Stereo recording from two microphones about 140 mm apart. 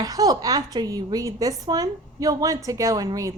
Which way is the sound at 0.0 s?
25° right (ahead or behind).